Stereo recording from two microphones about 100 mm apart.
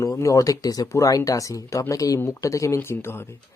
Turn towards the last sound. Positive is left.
turn(degrees=25)  # may be behind; listen again after turning